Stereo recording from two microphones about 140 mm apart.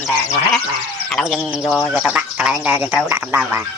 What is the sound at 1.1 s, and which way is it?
Speech, centre (ahead or behind).